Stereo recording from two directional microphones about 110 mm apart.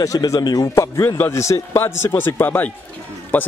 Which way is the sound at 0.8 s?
20° left (ahead or behind).